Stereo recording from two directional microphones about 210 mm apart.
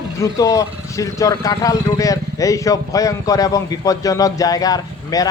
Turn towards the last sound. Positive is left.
turn(degrees=15)  # may be behind; listen again after turning